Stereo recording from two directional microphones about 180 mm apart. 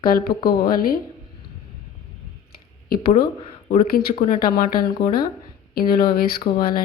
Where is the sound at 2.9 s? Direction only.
55° left (ahead or behind).